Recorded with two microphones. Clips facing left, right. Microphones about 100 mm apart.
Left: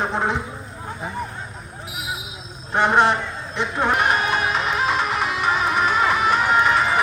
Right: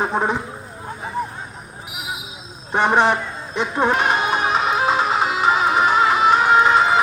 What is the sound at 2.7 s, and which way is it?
Music, 15° right (ahead or behind).